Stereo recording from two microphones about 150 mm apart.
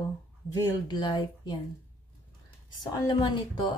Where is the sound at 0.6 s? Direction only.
30° left (ahead or behind).